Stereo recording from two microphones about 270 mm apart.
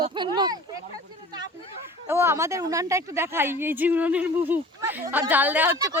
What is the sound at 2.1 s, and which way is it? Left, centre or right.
Speech, centre.